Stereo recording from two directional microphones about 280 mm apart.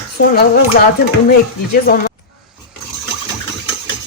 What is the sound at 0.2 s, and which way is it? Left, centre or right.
Speech, left.